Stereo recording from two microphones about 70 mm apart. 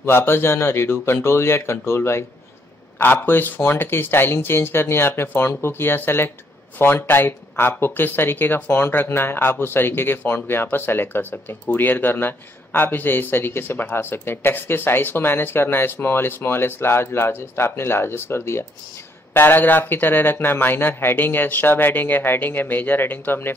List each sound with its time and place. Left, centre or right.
0.0 s a man's voice: left